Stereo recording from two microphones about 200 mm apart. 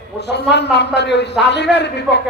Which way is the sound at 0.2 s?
60° left (ahead or behind).